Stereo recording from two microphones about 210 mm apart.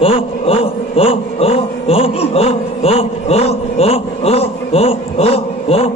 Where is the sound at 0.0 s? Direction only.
25° left (ahead or behind).